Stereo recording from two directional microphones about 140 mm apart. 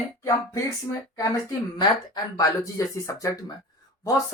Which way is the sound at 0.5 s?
20° left (ahead or behind).